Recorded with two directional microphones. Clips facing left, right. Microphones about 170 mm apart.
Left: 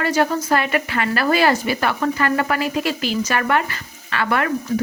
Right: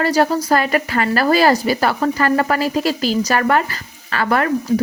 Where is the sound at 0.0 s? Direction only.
35° right (ahead or behind).